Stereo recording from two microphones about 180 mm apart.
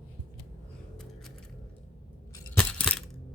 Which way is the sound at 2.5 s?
5° left (ahead or behind).